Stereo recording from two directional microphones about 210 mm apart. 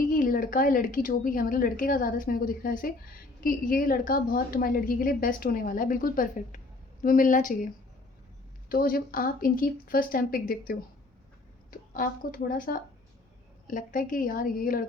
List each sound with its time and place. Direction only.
0.0 s a woman's voice: 40° left (ahead or behind)
8.7 s a woman's voice: 45° left (ahead or behind)